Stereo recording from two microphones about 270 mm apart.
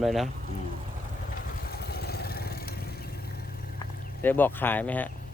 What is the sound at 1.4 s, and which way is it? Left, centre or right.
Vehicle, left.